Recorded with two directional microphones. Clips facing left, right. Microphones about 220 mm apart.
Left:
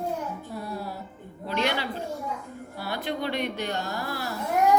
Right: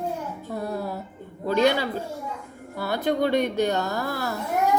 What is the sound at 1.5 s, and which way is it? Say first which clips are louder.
Speech: right 6 dB; 45° right (ahead or behind).